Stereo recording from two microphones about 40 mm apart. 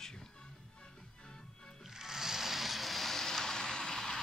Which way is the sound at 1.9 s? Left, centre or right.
Centre.